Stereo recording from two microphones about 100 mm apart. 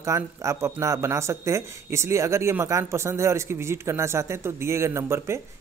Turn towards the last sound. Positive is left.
turn(degrees=-25)  # may be behind; listen again after turning